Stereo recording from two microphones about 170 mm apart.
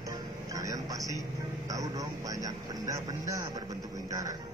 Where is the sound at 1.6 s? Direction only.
20° right (ahead or behind).